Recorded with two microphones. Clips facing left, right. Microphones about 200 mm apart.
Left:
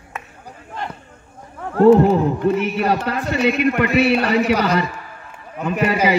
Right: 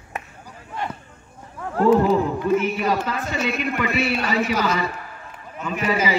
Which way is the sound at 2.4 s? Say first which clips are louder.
Left 2 dB; 65° left (ahead or behind).